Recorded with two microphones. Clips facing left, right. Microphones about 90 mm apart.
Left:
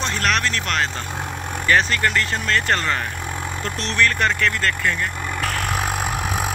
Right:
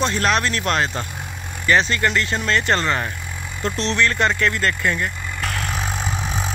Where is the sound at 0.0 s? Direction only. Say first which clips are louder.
Right 2 dB; 30° right (ahead or behind).